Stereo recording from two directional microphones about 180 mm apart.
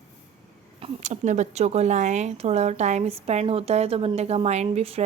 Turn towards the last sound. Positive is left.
turn(degrees=-35)  # may be behind; listen again after turning